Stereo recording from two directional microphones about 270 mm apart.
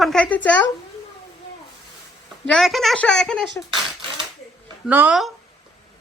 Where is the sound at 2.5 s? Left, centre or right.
Centre.